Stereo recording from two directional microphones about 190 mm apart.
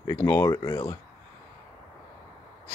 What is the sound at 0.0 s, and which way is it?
Speech, 20° left (ahead or behind).